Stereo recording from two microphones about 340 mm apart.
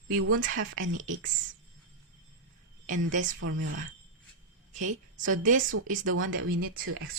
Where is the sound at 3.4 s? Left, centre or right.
Right.